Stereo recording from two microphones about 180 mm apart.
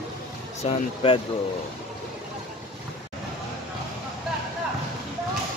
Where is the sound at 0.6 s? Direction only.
30° left (ahead or behind).